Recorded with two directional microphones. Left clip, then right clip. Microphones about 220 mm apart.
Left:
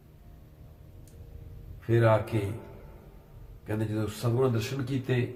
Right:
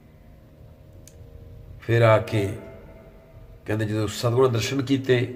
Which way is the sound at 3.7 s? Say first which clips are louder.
Right 6 dB; 45° right (ahead or behind).